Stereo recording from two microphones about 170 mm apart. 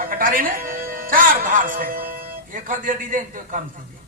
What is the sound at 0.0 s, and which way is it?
Speech, 55° right (ahead or behind).